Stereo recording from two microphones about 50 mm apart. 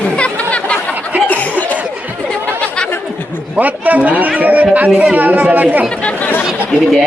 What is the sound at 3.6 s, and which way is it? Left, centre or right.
A man's voice, right.